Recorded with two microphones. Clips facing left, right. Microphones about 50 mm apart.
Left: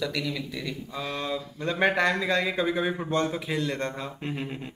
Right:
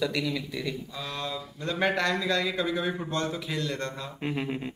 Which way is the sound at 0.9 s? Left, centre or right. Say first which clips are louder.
Left 3 dB; centre.